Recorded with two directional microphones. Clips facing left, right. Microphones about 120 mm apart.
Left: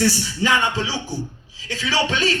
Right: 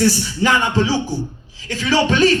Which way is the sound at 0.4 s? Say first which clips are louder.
Right 4 dB; 45° right (ahead or behind).